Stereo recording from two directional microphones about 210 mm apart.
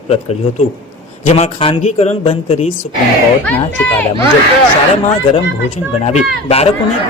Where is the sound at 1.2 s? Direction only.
30° left (ahead or behind).